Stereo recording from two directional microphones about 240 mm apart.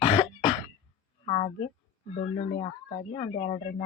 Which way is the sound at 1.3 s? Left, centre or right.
Left.